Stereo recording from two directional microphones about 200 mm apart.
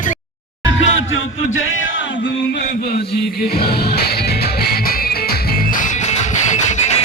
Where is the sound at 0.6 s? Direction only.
75° left (ahead or behind); by 2.9 s 55° left (ahead or behind).